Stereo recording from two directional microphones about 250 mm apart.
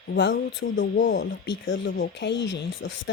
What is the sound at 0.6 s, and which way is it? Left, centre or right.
Speech, left.